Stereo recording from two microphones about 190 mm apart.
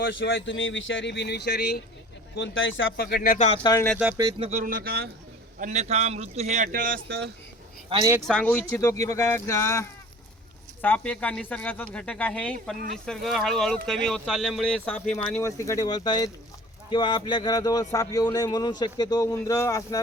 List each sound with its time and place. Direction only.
0.0 s speech: 70° left (ahead or behind)
2.3 s speech: 75° left (ahead or behind)
2.9 s speech: 50° left (ahead or behind); by 3.6 s 35° left (ahead or behind)
3.6 s speech: 20° left (ahead or behind)
4.4 s a man's voice: 35° right (ahead or behind)
4.6 s speech: 50° right (ahead or behind)
5.5 s a man's voice: 40° right (ahead or behind); by 7.3 s 55° right (ahead or behind)
8.2 s speech: 5° left (ahead or behind)